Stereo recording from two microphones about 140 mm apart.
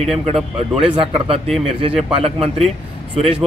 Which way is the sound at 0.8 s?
40° right (ahead or behind).